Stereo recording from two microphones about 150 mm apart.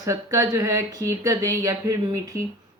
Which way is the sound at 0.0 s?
20° right (ahead or behind).